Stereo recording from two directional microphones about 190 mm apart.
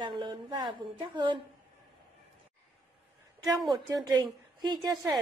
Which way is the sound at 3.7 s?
20° right (ahead or behind).